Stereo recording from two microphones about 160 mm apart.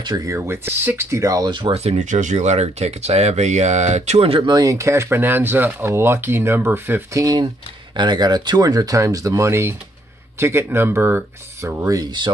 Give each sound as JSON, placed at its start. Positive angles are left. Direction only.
{"t": 0.0, "sound": "speech", "side_deg": -25}